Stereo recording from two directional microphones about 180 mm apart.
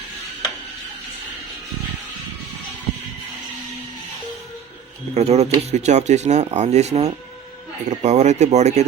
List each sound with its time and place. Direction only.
5.1 s speech: 35° right (ahead or behind)